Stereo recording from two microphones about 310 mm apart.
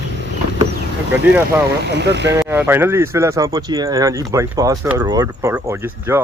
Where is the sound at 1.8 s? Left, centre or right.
Right.